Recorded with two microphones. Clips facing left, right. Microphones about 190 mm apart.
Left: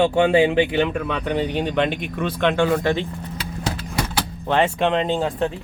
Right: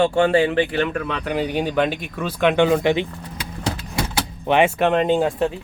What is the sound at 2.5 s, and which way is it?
Speech, 20° right (ahead or behind).